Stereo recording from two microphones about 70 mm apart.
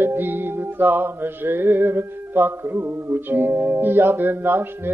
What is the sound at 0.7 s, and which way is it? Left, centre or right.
Mantra, right.